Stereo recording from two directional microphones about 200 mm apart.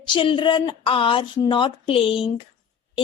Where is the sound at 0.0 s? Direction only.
25° left (ahead or behind).